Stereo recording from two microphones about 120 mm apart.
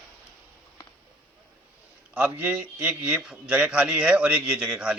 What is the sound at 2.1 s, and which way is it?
A man's voice, 15° right (ahead or behind).